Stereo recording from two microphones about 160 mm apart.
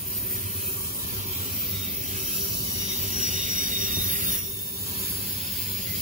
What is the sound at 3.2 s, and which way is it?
Train, 55° right (ahead or behind).